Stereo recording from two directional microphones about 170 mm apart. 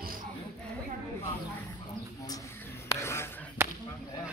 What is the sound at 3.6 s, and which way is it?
Whip, 15° right (ahead or behind).